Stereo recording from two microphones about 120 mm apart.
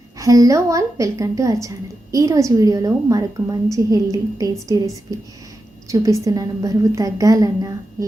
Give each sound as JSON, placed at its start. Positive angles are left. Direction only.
{"t": 0.2, "sound": "a woman's voice", "side_deg": -30}